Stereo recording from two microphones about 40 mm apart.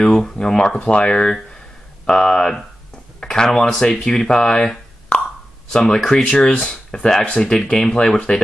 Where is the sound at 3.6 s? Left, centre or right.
Centre.